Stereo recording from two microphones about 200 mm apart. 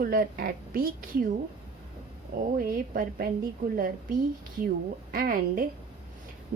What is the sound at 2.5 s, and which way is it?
A woman's voice, 45° right (ahead or behind).